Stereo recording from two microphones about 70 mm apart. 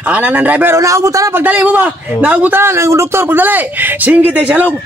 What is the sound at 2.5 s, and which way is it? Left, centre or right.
A man's voice, right.